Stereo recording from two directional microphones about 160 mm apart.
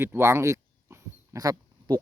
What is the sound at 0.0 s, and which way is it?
Speech, 15° right (ahead or behind).